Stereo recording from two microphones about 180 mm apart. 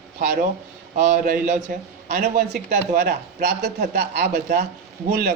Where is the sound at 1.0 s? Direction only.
40° right (ahead or behind).